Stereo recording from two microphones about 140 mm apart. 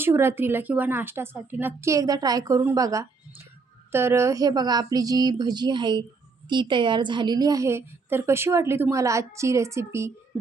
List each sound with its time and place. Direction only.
0.0 s a woman's voice: 15° right (ahead or behind)